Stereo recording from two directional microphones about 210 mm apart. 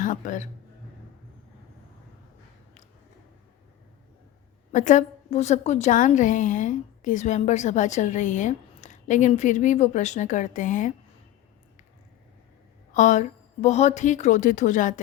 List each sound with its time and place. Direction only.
0.0 s a man's voice: 35° left (ahead or behind)
4.7 s a woman's voice: 35° left (ahead or behind)
12.9 s a woman's voice: 35° left (ahead or behind)